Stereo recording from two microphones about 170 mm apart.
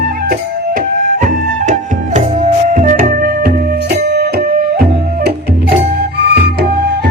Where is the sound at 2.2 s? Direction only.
45° right (ahead or behind); by 5.3 s 60° right (ahead or behind).